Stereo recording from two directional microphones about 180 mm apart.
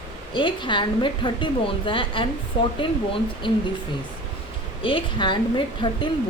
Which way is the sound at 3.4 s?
25° left (ahead or behind).